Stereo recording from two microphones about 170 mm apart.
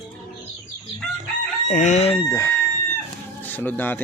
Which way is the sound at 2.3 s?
20° left (ahead or behind).